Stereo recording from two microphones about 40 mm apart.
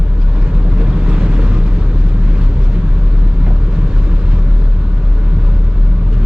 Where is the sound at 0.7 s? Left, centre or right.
Right.